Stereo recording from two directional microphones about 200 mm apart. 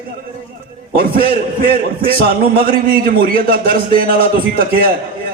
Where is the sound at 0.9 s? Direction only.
45° right (ahead or behind).